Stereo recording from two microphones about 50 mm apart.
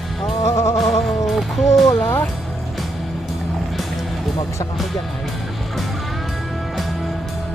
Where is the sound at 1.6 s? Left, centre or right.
Centre.